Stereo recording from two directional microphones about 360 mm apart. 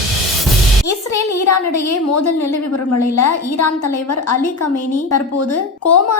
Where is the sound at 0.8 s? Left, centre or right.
Left.